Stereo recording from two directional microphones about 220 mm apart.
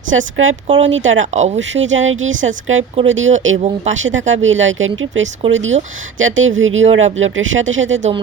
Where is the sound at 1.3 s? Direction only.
30° right (ahead or behind).